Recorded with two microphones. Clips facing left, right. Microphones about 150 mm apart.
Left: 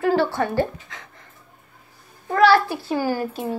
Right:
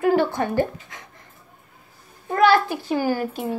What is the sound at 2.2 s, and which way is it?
A child's voice, 20° right (ahead or behind).